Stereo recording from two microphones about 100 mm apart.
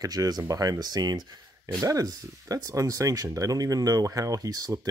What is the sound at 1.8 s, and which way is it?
Speech, 35° right (ahead or behind).